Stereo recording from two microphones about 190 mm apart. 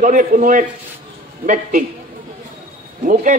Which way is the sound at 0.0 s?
45° right (ahead or behind).